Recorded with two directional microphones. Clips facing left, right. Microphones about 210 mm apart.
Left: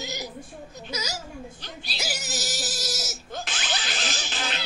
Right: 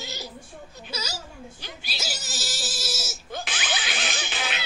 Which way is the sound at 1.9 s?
15° left (ahead or behind).